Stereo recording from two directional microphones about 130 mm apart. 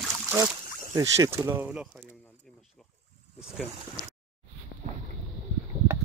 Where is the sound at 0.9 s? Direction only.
25° right (ahead or behind).